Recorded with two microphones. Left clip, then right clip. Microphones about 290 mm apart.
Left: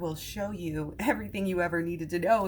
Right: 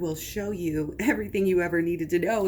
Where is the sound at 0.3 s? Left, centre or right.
Left.